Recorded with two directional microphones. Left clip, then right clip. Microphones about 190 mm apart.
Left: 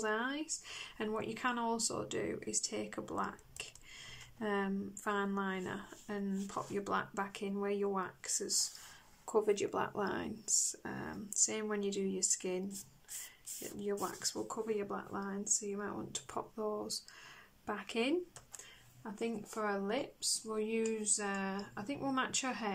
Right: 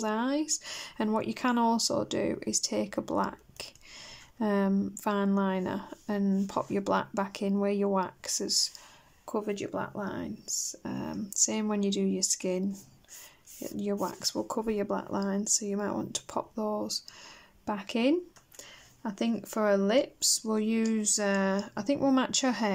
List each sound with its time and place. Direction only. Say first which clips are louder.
0.0 s speech: right 6 dB; 20° right (ahead or behind)
9.2 s speech: even; 5° right (ahead or behind); by 12.6 s 20° right (ahead or behind)
13.7 s speech: right 6 dB; 20° right (ahead or behind)
19.0 s speech: right 7 dB; 35° right (ahead or behind)